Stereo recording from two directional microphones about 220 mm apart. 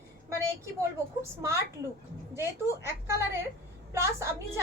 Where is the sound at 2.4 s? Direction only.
10° right (ahead or behind).